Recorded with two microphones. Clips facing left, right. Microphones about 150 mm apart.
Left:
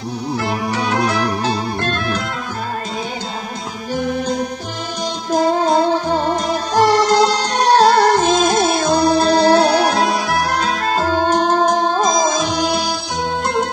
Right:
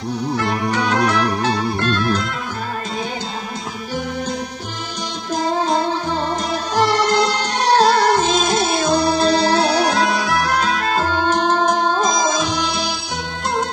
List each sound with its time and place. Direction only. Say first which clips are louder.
1.8 s music: right 2 dB; 45° left (ahead or behind)
5.3 s music: left 4 dB; 40° left (ahead or behind)